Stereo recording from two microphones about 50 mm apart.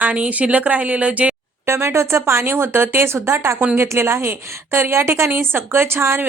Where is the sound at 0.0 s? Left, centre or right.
Right.